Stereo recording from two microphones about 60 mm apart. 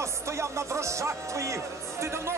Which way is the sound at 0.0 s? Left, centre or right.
Right.